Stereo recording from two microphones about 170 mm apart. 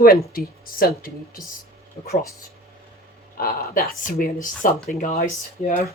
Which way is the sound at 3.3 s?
60° left (ahead or behind).